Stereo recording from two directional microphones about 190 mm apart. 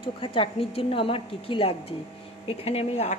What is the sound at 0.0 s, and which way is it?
A woman's voice, 25° left (ahead or behind).